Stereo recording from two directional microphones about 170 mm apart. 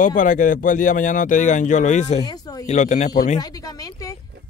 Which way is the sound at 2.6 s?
45° left (ahead or behind).